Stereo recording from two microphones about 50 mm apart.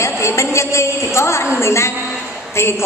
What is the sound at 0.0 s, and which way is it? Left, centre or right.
A woman's voice, left.